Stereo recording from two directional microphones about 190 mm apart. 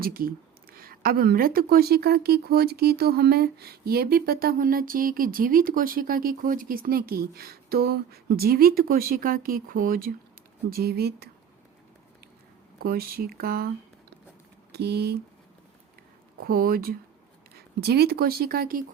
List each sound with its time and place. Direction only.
0.0 s speech: 50° right (ahead or behind)
12.8 s speech: 50° right (ahead or behind)
16.4 s speech: 50° right (ahead or behind)